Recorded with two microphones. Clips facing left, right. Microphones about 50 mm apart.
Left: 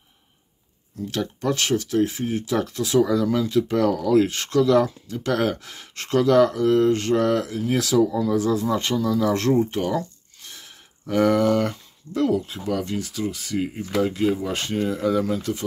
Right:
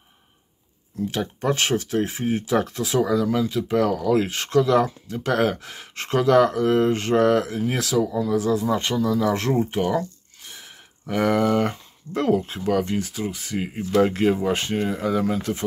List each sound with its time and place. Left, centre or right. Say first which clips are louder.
1.0 s speech: right 1 dB; centre
7.8 s speech: left 4 dB; centre
13.9 s speech: right 3 dB; right
14.5 s speech: right 1 dB; right